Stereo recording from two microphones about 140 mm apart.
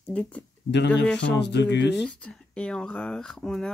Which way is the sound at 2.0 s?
5° left (ahead or behind).